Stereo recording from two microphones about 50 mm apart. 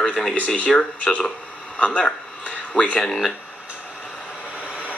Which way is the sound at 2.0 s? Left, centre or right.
Left.